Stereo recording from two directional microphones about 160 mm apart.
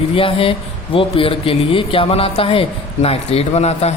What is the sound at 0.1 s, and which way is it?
Speech, 35° left (ahead or behind).